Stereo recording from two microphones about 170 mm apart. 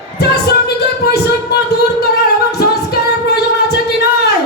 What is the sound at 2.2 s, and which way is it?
Singing, 70° left (ahead or behind).